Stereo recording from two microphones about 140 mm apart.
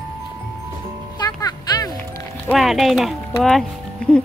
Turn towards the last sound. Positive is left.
turn(degrees=5)  # may be behind; listen again after turning